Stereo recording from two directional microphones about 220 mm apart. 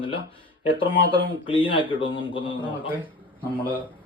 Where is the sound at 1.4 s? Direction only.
25° left (ahead or behind).